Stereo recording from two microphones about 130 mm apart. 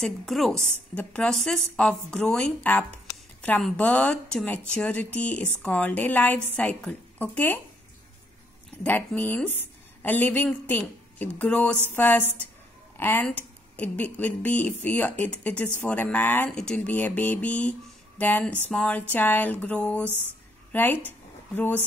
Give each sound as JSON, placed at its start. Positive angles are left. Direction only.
{"t": 0.0, "sound": "a woman's voice", "side_deg": 0}
{"t": 8.8, "sound": "a woman's voice", "side_deg": 15}